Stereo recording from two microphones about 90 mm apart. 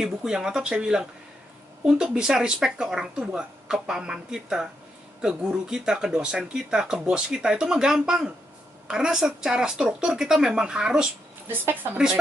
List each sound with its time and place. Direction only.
0.0 s speech: 10° right (ahead or behind)
2.1 s speech: 5° right (ahead or behind)
11.4 s a woman's voice: 20° right (ahead or behind)